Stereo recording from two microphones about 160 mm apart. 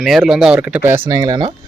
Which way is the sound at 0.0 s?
Centre (ahead or behind).